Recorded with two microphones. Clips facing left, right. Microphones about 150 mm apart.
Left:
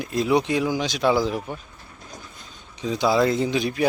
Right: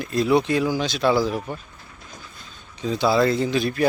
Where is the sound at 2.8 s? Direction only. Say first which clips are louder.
Right 1 dB; 15° left (ahead or behind).